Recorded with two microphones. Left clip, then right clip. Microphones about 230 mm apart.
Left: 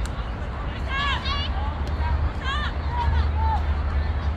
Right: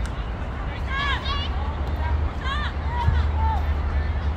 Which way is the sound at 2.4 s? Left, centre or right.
Centre.